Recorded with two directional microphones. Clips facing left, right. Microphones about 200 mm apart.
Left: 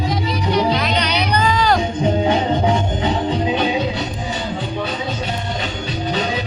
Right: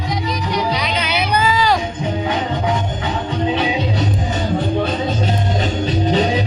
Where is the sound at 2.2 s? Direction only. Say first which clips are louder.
Left 3 dB; 30° left (ahead or behind).